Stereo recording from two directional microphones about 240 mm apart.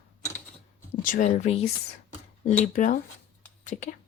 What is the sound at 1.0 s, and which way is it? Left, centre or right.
Speech, left.